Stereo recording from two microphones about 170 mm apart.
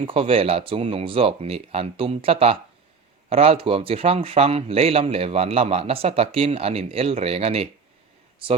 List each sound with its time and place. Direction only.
0.0 s a man's voice: 35° right (ahead or behind)